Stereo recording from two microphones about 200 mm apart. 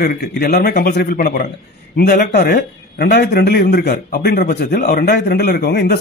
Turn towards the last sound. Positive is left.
turn(degrees=55)  # may be behind; listen again after turning